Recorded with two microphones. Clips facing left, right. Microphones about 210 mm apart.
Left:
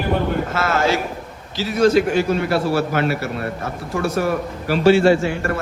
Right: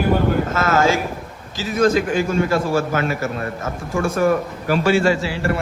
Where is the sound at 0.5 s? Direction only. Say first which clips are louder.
Even; 45° right (ahead or behind).